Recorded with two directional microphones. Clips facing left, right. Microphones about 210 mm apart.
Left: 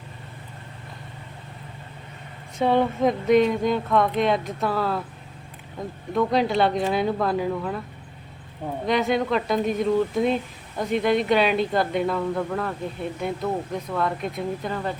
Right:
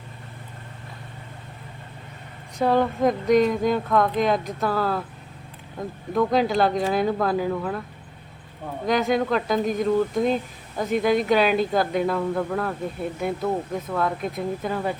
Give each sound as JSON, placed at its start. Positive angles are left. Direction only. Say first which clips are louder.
{"t": 2.6, "sound": "speech", "louder": "even", "side_deg": 0}
{"t": 8.9, "sound": "speech", "louder": "right 1 dB", "side_deg": 0}